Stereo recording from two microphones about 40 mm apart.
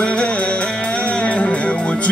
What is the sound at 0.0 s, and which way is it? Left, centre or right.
Music, left.